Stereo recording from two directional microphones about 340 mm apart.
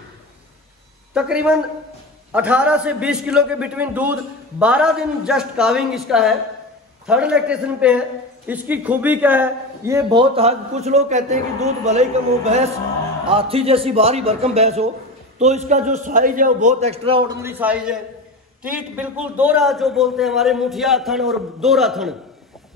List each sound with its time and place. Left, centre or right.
1.1 s a man's voice: centre